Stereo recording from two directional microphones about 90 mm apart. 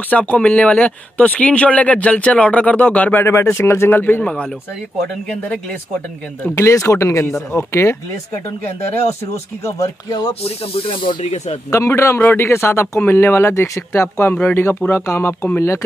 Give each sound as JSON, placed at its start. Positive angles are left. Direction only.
{"t": 0.1, "sound": "speech", "side_deg": 15}
{"t": 4.0, "sound": "speech", "side_deg": 15}
{"t": 6.4, "sound": "speech", "side_deg": 30}
{"t": 9.7, "sound": "speech", "side_deg": 40}
{"t": 10.4, "sound": "speech", "side_deg": 90}
{"t": 11.7, "sound": "a man's voice", "side_deg": 35}